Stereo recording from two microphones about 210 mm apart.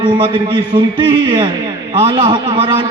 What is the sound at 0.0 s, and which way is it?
A man's voice, 20° right (ahead or behind).